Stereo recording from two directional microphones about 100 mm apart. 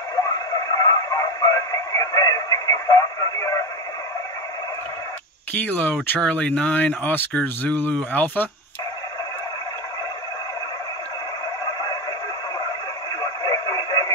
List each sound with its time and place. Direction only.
0.1 s radio: 35° left (ahead or behind)
5.5 s speech: 15° left (ahead or behind)
11.6 s a sound: 40° left (ahead or behind)
13.2 s radio: 40° left (ahead or behind)